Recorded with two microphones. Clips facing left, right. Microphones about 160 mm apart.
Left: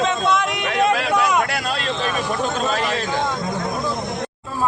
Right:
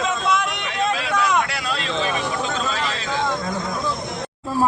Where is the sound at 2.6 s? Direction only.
50° left (ahead or behind).